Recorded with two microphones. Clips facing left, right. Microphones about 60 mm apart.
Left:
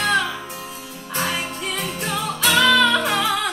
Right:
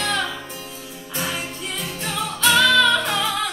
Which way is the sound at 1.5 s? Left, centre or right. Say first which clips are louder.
Left 3 dB; left.